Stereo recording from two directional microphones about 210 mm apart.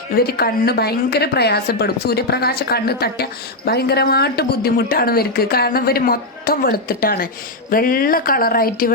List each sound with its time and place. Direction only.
0.1 s speech: 45° left (ahead or behind)